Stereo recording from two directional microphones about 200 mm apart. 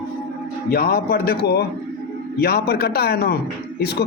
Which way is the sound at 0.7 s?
50° left (ahead or behind).